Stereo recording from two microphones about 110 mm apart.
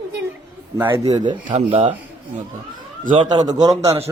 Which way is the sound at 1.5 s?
55° right (ahead or behind).